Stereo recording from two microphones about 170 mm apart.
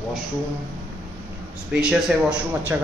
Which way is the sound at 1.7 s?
5° right (ahead or behind).